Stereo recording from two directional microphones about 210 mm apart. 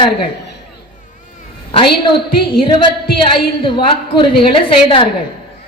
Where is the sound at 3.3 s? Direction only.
25° left (ahead or behind).